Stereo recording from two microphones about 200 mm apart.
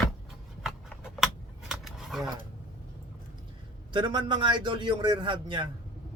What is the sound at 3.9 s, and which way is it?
A man's voice, 25° right (ahead or behind).